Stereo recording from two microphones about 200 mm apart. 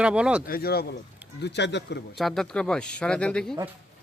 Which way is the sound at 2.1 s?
Centre (ahead or behind).